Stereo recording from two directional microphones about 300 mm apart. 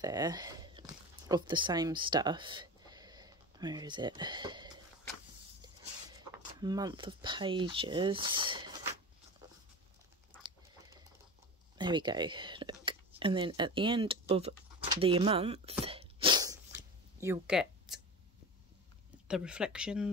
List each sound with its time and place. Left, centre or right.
0.0 s speech: centre
6.6 s speech: centre
11.8 s speech: centre
15.8 s sneeze: centre
19.2 s speech: centre